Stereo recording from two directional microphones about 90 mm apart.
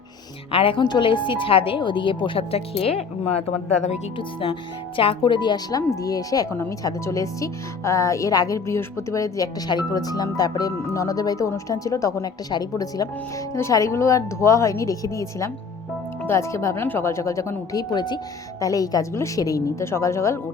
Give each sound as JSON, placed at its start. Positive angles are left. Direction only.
{"t": 0.5, "sound": "a woman's voice", "side_deg": 85}
{"t": 4.2, "sound": "a woman's voice", "side_deg": 70}
{"t": 6.5, "sound": "speech", "side_deg": 30}
{"t": 17.7, "sound": "speech", "side_deg": 50}
{"t": 18.6, "sound": "speech", "side_deg": 40}